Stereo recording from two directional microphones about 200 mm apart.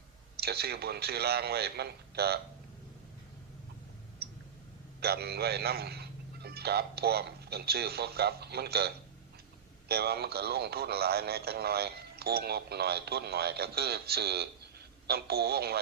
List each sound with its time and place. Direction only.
0.3 s speech: 50° right (ahead or behind)
4.2 s clicking: 50° right (ahead or behind)
4.9 s a man's voice: 50° right (ahead or behind)
9.9 s speech: 50° right (ahead or behind)